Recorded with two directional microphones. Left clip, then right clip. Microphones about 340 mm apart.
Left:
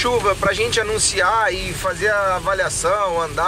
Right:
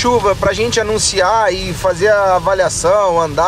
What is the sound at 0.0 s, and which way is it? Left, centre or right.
Speech, centre.